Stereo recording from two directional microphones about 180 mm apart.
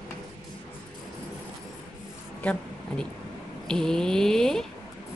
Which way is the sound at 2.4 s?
5° left (ahead or behind).